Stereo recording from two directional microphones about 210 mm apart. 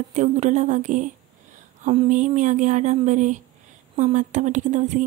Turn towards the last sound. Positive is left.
turn(degrees=-35)  # may be behind; listen again after turning